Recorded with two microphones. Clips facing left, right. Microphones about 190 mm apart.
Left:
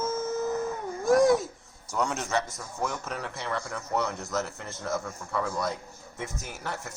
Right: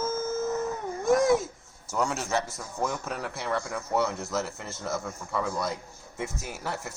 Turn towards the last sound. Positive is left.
turn(degrees=-5)  # may be behind; listen again after turning